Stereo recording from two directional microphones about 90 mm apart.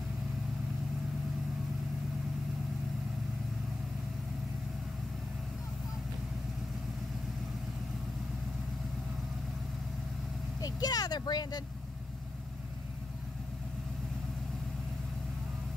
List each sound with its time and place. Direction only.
10.6 s speech: 45° left (ahead or behind)